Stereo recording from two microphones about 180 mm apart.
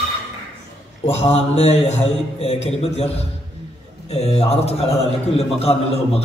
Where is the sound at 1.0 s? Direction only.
35° left (ahead or behind).